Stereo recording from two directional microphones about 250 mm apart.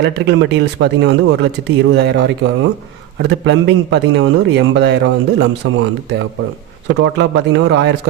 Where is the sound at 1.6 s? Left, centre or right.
Right.